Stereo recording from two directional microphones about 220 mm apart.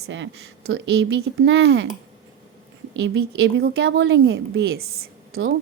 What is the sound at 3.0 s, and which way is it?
A woman's voice, 55° right (ahead or behind).